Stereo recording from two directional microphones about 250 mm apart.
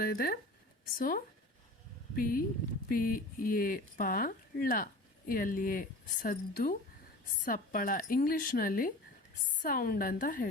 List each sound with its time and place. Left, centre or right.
0.0 s speech: left